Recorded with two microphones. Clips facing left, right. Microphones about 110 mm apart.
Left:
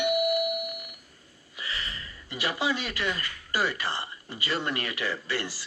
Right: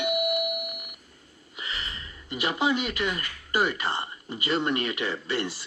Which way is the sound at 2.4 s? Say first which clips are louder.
Right 3 dB; 20° right (ahead or behind).